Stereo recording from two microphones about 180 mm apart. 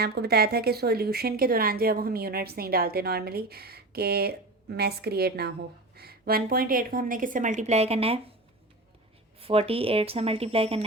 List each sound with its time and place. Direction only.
0.0 s a woman's voice: 65° right (ahead or behind); by 8.2 s 35° right (ahead or behind)
9.4 s speech: 35° right (ahead or behind)